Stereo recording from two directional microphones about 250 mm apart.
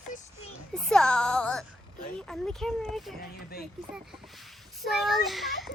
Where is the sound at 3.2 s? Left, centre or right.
Left.